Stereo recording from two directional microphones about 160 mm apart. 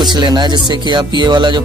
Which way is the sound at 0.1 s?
25° right (ahead or behind).